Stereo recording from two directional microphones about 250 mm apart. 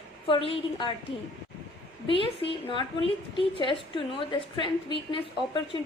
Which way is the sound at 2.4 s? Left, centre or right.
Centre.